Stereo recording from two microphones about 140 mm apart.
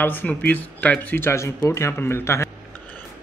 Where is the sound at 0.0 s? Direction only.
15° left (ahead or behind).